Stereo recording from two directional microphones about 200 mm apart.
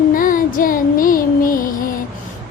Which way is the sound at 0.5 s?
45° left (ahead or behind).